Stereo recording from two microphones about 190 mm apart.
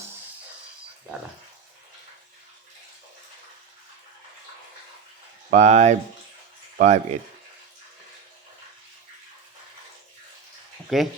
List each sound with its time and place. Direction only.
5.5 s speech: 40° right (ahead or behind)
10.8 s speech: centre (ahead or behind)